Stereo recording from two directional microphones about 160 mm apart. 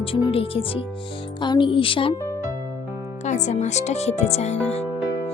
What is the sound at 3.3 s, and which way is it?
Speech, 50° left (ahead or behind).